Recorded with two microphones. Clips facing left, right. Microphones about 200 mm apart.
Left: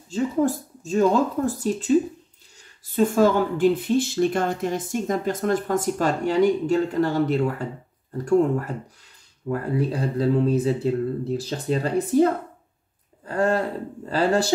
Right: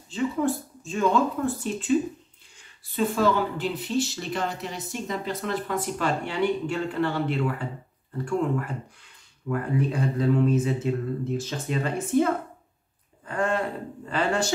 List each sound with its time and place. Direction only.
0.1 s speech: 40° left (ahead or behind)